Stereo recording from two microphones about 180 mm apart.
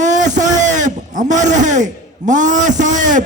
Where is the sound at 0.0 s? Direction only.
40° right (ahead or behind).